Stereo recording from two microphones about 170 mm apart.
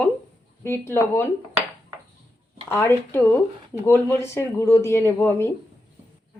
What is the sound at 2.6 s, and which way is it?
Speech, 15° left (ahead or behind).